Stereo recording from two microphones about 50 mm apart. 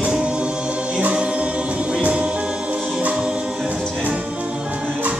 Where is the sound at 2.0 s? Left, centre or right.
Right.